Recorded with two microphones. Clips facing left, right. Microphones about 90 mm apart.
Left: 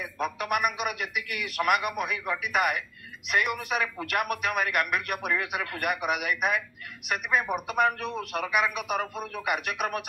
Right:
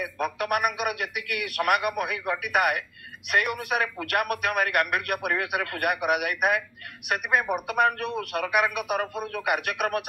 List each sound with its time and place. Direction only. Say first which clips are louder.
0.0 s a man's voice: right 3 dB; 55° right (ahead or behind)